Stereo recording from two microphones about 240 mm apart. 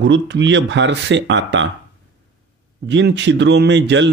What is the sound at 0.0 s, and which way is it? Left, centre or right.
Speech, right.